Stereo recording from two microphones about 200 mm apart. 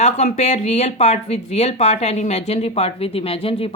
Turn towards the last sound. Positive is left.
turn(degrees=30)  # may be behind; listen again after turning